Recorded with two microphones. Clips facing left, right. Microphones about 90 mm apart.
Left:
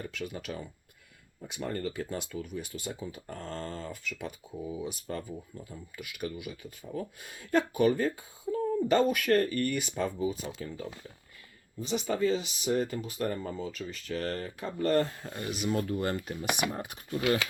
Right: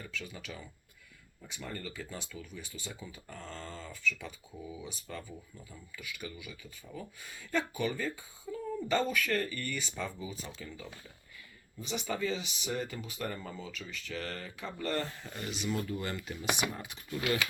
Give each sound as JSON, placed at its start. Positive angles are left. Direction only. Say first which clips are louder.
{"t": 0.0, "sound": "speech", "louder": "left 6 dB", "side_deg": 60}
{"t": 5.1, "sound": "speech", "louder": "left 6 dB", "side_deg": 40}
{"t": 6.0, "sound": "speech", "louder": "left 7 dB", "side_deg": 60}
{"t": 10.7, "sound": "speech", "louder": "left 6 dB", "side_deg": 40}